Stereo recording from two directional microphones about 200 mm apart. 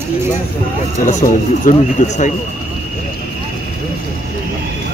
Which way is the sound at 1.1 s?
40° left (ahead or behind).